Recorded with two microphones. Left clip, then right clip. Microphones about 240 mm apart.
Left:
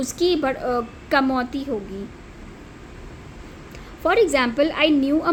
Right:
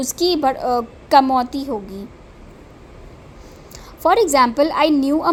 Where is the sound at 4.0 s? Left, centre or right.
Right.